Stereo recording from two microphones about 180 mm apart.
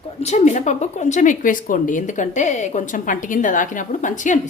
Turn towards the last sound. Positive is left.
turn(degrees=45)  # may be behind; listen again after turning